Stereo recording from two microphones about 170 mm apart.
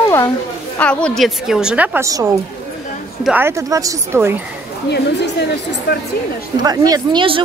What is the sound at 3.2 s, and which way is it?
Speech, 10° right (ahead or behind).